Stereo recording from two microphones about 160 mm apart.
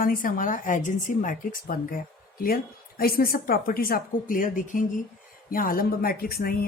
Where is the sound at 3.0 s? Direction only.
65° left (ahead or behind).